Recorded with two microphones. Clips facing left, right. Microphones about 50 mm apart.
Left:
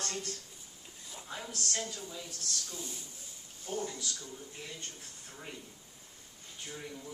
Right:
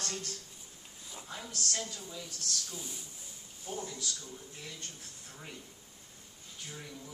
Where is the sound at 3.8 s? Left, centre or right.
Left.